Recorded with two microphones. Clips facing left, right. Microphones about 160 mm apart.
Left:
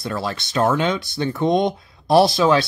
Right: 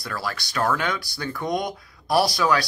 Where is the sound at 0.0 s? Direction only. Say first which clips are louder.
Left 5 dB; 25° left (ahead or behind).